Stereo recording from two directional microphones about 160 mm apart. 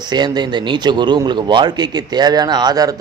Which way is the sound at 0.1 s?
25° right (ahead or behind).